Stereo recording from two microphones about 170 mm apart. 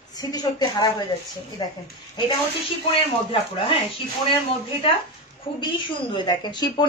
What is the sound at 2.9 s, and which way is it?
Speech, 30° left (ahead or behind).